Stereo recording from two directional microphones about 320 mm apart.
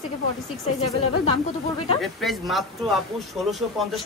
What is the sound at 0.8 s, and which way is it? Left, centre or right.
Speech, centre.